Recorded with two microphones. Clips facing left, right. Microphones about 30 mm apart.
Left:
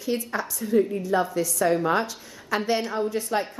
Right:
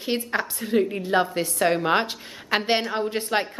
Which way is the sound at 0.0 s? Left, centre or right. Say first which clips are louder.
Right 2 dB; right.